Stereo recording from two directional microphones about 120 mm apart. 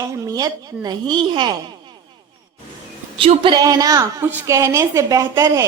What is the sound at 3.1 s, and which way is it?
Speech, 50° right (ahead or behind).